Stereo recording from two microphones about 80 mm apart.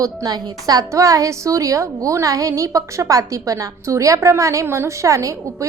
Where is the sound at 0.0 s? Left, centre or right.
Right.